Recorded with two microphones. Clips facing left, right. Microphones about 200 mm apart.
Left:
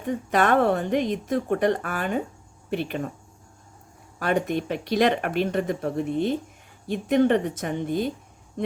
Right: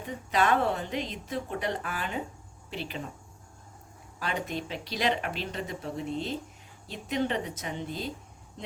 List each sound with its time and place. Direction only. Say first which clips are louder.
0.3 s a woman's voice: left 5 dB; 55° left (ahead or behind)
4.2 s a woman's voice: left 9 dB; 55° left (ahead or behind)